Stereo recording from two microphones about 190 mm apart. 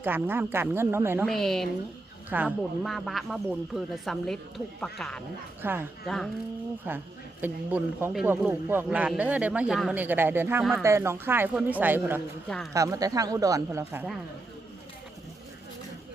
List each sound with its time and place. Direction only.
0.0 s speech: 10° right (ahead or behind)
1.3 s speech: centre (ahead or behind)
5.6 s speech: 10° right (ahead or behind)
6.9 s speech: 10° right (ahead or behind)
10.6 s speech: centre (ahead or behind)
10.8 s speech: 15° right (ahead or behind)